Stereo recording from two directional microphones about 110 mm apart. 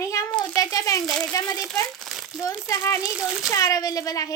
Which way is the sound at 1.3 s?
30° left (ahead or behind).